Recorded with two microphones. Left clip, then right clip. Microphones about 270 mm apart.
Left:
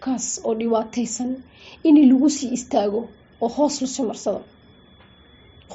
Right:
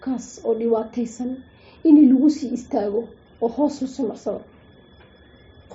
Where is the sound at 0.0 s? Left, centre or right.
Left.